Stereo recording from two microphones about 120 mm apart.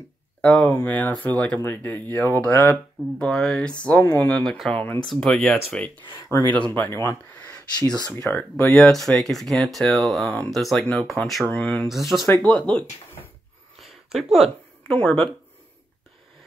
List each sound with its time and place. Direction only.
0.4 s speech: 10° left (ahead or behind)
4.4 s speech: 5° left (ahead or behind)
6.2 s speech: 15° left (ahead or behind); by 11.4 s centre (ahead or behind)
11.4 s speech: 10° left (ahead or behind)
11.9 s speech: centre (ahead or behind)
12.3 s speech: 10° left (ahead or behind)
13.7 s a sound: centre (ahead or behind)
15.0 s speech: 10° left (ahead or behind)